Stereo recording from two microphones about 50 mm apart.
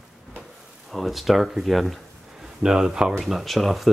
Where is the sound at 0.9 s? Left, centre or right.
Centre.